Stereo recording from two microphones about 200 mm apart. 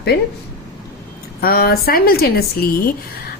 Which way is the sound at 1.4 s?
50° left (ahead or behind).